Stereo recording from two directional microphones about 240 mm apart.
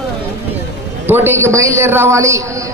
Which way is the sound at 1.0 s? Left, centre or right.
Centre.